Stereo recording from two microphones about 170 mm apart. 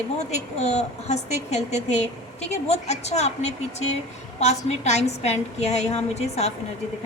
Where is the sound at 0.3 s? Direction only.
40° left (ahead or behind).